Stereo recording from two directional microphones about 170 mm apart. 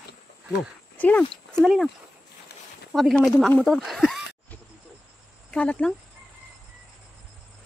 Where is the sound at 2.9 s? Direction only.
Centre (ahead or behind).